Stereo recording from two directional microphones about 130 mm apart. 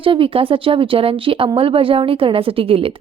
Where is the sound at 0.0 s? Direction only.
45° right (ahead or behind).